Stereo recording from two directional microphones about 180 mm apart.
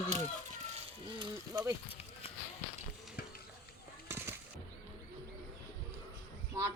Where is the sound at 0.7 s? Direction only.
30° right (ahead or behind).